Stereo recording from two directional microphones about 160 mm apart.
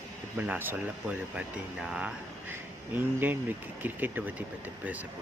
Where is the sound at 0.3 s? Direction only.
10° right (ahead or behind).